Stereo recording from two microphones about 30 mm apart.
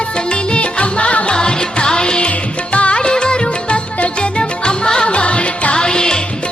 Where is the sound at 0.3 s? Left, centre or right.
Left.